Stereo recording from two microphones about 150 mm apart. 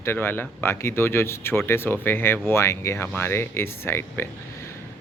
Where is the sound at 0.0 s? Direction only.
15° left (ahead or behind).